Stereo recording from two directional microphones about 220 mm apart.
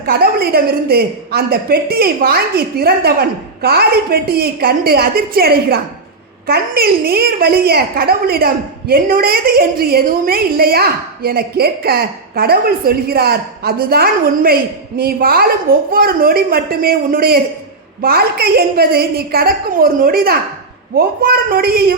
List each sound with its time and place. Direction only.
0.0 s a woman's voice: 45° right (ahead or behind)